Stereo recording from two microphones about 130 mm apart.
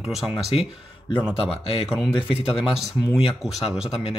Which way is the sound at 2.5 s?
5° right (ahead or behind).